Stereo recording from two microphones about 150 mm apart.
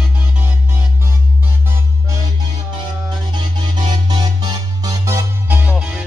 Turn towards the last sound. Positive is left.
turn(degrees=-5)  # may be behind; listen again after turning